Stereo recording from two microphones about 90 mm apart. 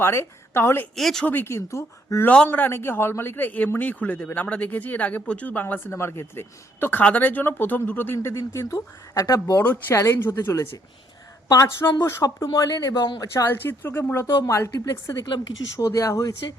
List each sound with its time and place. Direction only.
0.0 s speech: 25° left (ahead or behind)
0.9 s speech: 5° left (ahead or behind)
1.3 s speech: 25° left (ahead or behind); by 9.6 s 40° left (ahead or behind)
9.6 s speech: 20° left (ahead or behind)
9.9 s speech: 35° left (ahead or behind)
13.1 s speech: 25° left (ahead or behind)
14.4 s speech: 35° left (ahead or behind)